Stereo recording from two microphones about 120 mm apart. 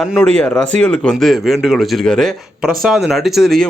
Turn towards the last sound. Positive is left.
turn(degrees=0)  # may be behind; listen again after turning